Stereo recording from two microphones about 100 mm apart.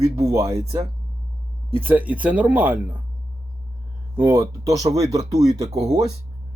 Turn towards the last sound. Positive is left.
turn(degrees=-40)  # may be behind; listen again after turning